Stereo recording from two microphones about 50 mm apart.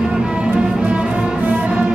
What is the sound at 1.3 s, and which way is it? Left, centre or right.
Music, right.